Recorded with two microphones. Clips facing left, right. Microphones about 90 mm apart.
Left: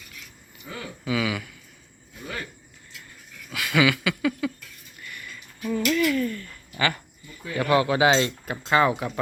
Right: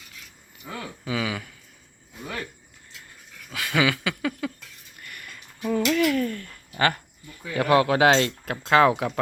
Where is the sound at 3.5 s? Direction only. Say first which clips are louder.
Left 2 dB; 35° right (ahead or behind).